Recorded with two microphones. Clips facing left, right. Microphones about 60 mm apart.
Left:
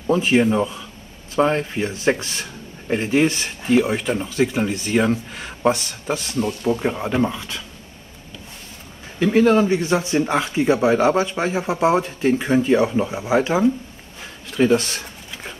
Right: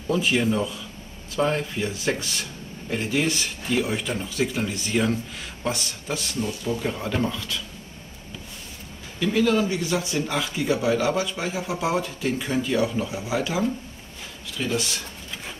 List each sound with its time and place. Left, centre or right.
0.1 s speech: left
6.4 s speech: left
6.8 s speech: left
9.2 s speech: left
14.6 s speech: left